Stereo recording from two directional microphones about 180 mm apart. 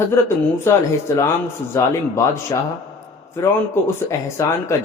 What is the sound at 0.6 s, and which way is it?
Speech, 15° left (ahead or behind).